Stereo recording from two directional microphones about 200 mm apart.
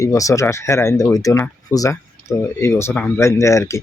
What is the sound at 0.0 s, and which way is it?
Speech, 15° left (ahead or behind).